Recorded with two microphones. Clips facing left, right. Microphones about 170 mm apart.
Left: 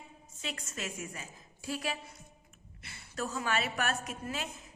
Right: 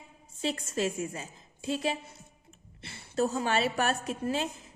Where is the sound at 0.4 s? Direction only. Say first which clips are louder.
Right 10 dB; 30° right (ahead or behind).